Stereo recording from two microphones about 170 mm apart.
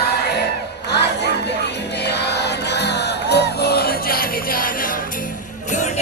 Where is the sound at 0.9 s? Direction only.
80° left; by 5.0 s 55° left (ahead or behind).